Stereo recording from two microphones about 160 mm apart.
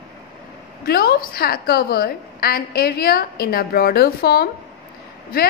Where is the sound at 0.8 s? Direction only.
70° left (ahead or behind).